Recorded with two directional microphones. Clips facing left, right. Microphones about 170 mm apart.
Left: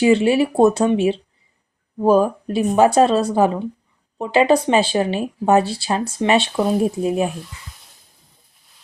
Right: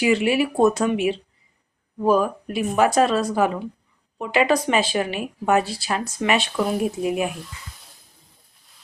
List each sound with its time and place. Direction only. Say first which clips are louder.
0.0 s speech: left 5 dB; 30° left (ahead or behind)